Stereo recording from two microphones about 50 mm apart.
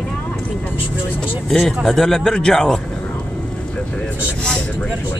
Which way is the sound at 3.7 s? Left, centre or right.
Left.